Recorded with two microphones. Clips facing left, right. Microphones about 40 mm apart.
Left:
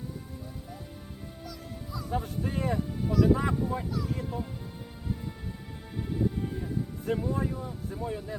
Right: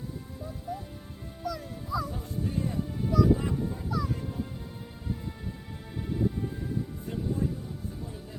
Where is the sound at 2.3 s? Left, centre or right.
Left.